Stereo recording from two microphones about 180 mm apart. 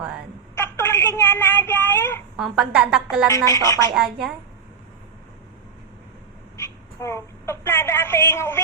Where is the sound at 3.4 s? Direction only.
20° left (ahead or behind).